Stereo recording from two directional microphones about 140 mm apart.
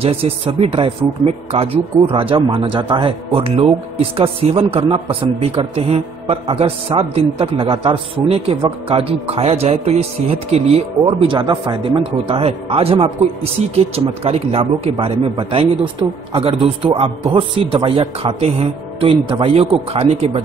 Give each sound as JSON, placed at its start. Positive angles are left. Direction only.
{"t": 0.0, "sound": "a man's voice", "side_deg": -45}